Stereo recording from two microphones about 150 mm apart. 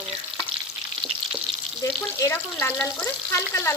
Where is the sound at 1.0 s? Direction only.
30° right (ahead or behind).